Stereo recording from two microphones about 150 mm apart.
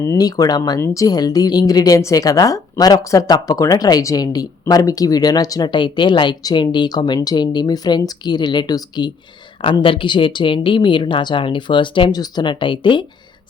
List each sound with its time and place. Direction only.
0.0 s speech: 20° left (ahead or behind)